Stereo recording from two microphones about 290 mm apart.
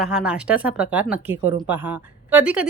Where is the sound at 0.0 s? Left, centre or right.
Centre.